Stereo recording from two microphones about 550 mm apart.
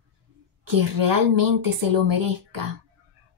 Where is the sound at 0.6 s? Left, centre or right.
Right.